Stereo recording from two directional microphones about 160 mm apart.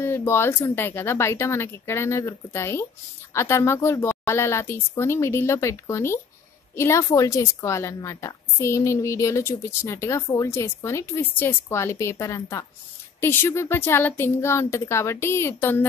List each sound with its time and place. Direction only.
0.0 s speech: 15° left (ahead or behind)